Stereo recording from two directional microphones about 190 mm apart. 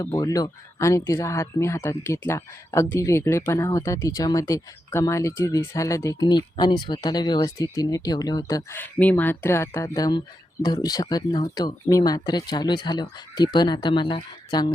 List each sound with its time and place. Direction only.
0.0 s speech: 15° left (ahead or behind)